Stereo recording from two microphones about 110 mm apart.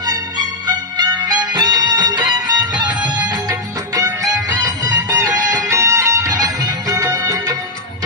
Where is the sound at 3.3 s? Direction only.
35° right (ahead or behind).